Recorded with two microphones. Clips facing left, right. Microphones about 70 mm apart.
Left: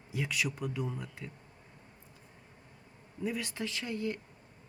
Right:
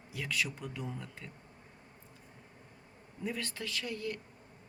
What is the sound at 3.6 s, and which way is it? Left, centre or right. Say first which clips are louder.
Speech: left 3 dB; left.